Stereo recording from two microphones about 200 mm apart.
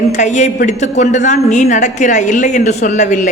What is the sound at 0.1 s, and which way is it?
A woman's voice, 35° left (ahead or behind).